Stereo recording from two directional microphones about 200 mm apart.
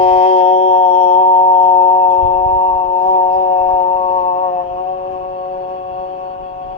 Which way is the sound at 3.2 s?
30° left (ahead or behind).